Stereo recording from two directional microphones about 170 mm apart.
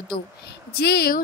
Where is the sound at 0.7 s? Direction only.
70° left (ahead or behind).